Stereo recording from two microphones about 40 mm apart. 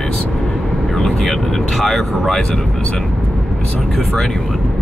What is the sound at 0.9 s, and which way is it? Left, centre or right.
Speech, centre.